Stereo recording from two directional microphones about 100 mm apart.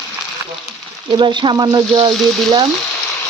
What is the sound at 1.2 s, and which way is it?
Speech, 50° right (ahead or behind).